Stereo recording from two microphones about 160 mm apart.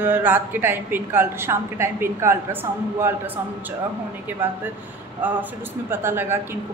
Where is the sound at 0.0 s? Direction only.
10° right (ahead or behind).